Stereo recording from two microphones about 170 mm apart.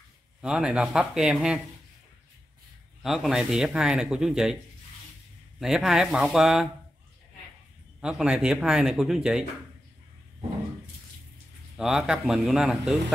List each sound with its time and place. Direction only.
0.4 s speech: 5° right (ahead or behind)
3.0 s speech: centre (ahead or behind)
5.6 s speech: centre (ahead or behind)
8.0 s speech: 5° right (ahead or behind)
11.7 s speech: 5° right (ahead or behind)